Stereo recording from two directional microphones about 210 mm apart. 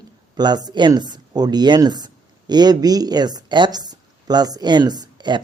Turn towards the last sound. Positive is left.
turn(degrees=-20)  # may be behind; listen again after turning